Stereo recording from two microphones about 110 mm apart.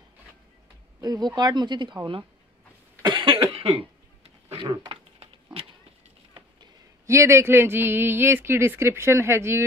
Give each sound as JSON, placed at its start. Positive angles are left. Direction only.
{"t": 1.0, "sound": "speech", "side_deg": -40}
{"t": 3.1, "sound": "cough", "side_deg": -50}
{"t": 3.5, "sound": "cough", "side_deg": -60}
{"t": 4.6, "sound": "dog", "side_deg": -50}
{"t": 7.1, "sound": "speech", "side_deg": -25}